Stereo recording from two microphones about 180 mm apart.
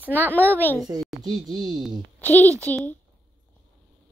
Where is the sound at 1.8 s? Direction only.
10° left (ahead or behind).